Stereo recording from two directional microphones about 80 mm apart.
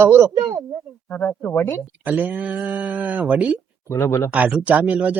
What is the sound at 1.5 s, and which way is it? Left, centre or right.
Speech, left.